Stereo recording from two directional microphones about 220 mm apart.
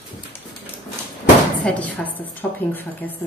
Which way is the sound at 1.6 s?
5° left (ahead or behind).